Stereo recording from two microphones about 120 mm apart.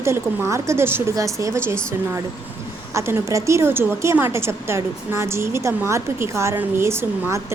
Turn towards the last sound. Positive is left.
turn(degrees=-20)  # may be behind; listen again after turning